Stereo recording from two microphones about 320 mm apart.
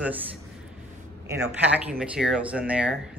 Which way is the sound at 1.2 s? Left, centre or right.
Centre.